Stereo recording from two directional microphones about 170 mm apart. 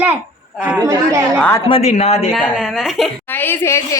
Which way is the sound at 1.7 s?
35° left (ahead or behind).